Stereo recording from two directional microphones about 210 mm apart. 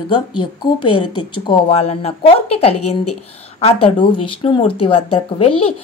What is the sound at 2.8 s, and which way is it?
Speech, 90° left.